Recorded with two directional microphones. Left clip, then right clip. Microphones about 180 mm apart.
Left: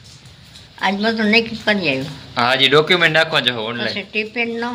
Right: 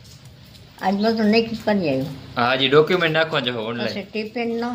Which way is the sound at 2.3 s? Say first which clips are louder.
Left 3 dB; 10° left (ahead or behind).